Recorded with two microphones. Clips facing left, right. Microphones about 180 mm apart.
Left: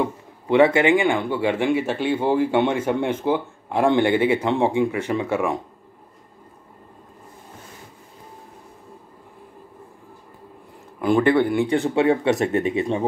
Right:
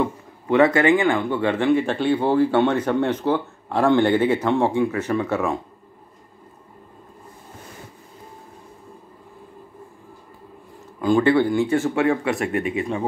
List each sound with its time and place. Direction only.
0.0 s speech: 10° left (ahead or behind)
11.0 s speech: 20° left (ahead or behind)